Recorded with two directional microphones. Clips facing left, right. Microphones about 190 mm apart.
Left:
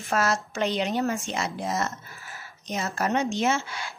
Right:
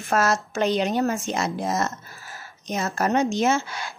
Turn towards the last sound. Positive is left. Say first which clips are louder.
# right 3 dB
turn(degrees=-40)  # may be behind; listen again after turning